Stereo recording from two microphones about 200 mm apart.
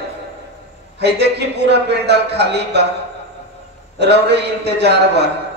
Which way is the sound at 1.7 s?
55° right (ahead or behind).